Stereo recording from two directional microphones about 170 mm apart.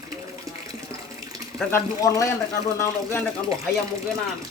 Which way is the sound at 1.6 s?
15° left (ahead or behind).